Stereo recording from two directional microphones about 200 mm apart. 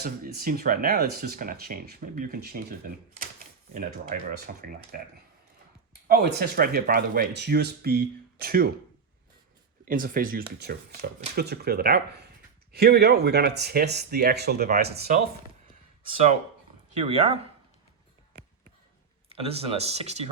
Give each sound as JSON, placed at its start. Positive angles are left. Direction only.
{"t": 0.0, "sound": "speech", "side_deg": -50}
{"t": 3.8, "sound": "speech", "side_deg": -45}
{"t": 6.1, "sound": "speech", "side_deg": -50}
{"t": 9.8, "sound": "speech", "side_deg": -45}
{"t": 17.0, "sound": "speech", "side_deg": -30}
{"t": 19.3, "sound": "speech", "side_deg": -30}